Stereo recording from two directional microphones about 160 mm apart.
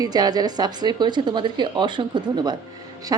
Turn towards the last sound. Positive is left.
turn(degrees=-20)  # may be behind; listen again after turning